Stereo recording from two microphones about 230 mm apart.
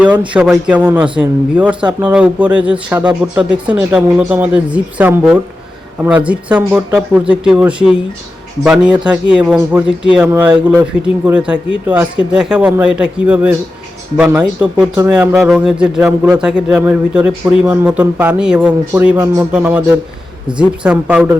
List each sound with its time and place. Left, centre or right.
0.3 s speech: centre
1.8 s speech: centre
2.0 s speech: centre